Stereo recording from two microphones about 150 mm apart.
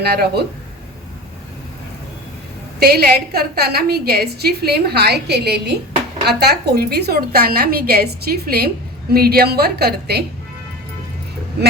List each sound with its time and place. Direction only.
0.0 s a woman's voice: 90° right
2.9 s a woman's voice: 90° right